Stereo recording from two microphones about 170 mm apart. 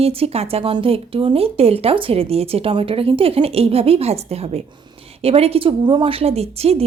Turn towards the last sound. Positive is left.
turn(degrees=-35)  # may be behind; listen again after turning